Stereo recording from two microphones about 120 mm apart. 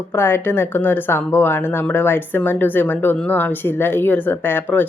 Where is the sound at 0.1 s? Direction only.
20° left (ahead or behind).